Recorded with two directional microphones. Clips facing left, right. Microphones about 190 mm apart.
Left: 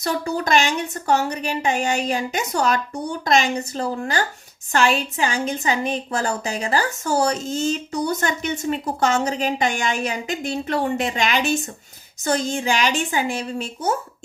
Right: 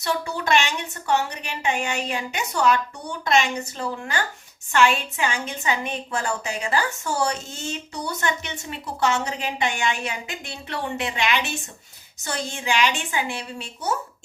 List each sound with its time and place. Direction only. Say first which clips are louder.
0.0 s a woman's voice: left 3 dB; 40° left (ahead or behind)